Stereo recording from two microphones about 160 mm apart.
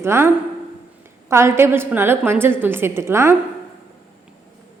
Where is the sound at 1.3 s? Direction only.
15° right (ahead or behind).